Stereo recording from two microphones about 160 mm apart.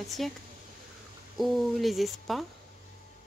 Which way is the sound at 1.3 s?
Centre (ahead or behind).